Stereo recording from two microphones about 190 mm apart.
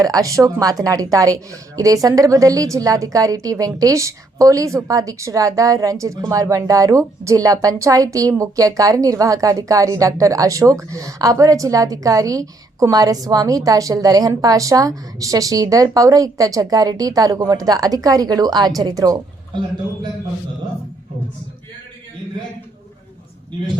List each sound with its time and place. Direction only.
0.0 s a woman's voice: 20° right (ahead or behind)